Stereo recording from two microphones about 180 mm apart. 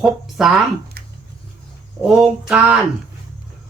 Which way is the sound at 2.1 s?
5° right (ahead or behind).